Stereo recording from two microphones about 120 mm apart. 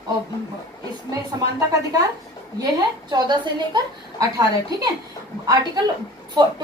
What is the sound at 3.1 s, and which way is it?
A woman's voice, 35° right (ahead or behind).